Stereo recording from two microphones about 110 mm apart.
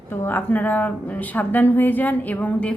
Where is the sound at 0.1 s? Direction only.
20° left (ahead or behind).